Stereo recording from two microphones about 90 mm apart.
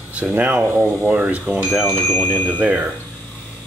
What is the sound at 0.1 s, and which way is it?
Speech, 15° right (ahead or behind).